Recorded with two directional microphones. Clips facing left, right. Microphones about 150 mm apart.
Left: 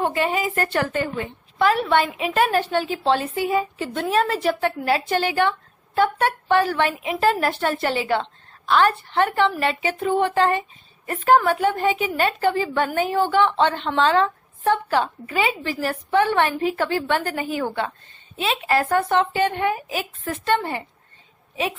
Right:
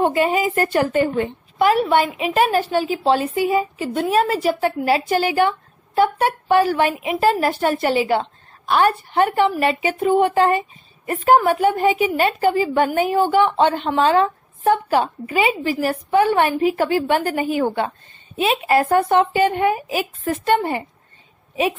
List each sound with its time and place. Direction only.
0.0 s a woman's voice: 20° right (ahead or behind)